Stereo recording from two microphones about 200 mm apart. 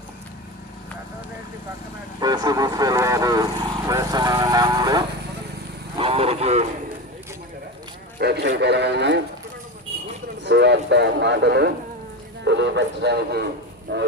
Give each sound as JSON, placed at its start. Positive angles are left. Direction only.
{"t": 2.2, "sound": "speech", "side_deg": -20}
{"t": 3.8, "sound": "vehicle", "side_deg": -20}
{"t": 8.2, "sound": "a man's voice", "side_deg": -55}
{"t": 10.4, "sound": "a man's voice", "side_deg": -60}